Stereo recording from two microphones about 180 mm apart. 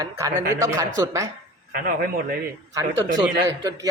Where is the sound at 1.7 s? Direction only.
55° right (ahead or behind).